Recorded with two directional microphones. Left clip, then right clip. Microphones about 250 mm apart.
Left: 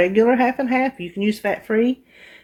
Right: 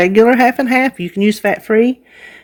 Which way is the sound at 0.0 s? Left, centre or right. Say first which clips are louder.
Right 6 dB; right.